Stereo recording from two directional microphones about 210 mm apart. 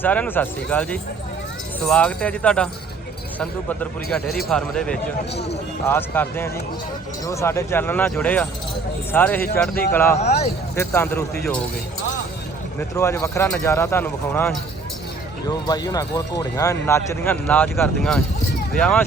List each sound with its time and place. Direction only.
0.0 s speech: 10° left (ahead or behind)
10.2 s speech: 30° left (ahead or behind)
10.8 s speech: 10° left (ahead or behind)
13.0 s speech: 15° left (ahead or behind)